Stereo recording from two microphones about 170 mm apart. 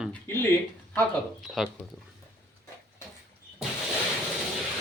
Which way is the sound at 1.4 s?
Centre (ahead or behind).